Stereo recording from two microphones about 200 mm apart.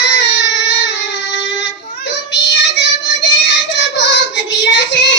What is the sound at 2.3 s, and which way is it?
Child singing, 60° left (ahead or behind).